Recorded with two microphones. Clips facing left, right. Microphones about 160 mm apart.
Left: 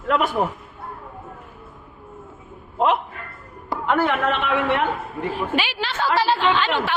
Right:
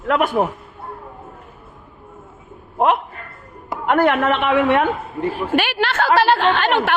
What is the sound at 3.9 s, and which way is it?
A woman's voice, 60° right (ahead or behind).